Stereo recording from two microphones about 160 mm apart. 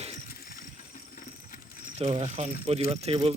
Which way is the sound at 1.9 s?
45° right (ahead or behind).